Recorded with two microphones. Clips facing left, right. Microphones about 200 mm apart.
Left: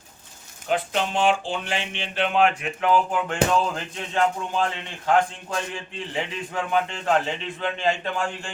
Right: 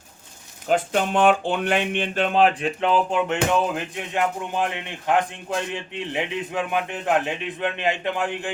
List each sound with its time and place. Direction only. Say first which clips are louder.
0.7 s speech: right 3 dB; 50° right (ahead or behind); by 8.5 s 20° right (ahead or behind)